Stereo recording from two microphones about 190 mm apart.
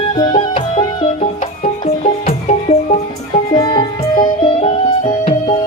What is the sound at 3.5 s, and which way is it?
Music, 25° left (ahead or behind).